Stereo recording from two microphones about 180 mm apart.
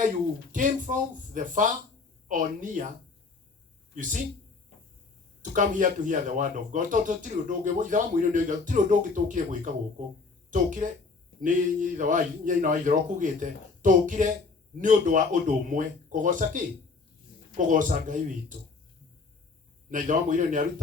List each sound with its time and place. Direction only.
0.5 s speech: 45° right (ahead or behind)
5.4 s speech: 45° right (ahead or behind)
19.9 s speech: 45° right (ahead or behind)